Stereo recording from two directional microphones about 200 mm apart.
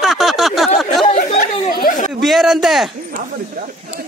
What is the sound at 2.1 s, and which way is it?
Speech, centre (ahead or behind).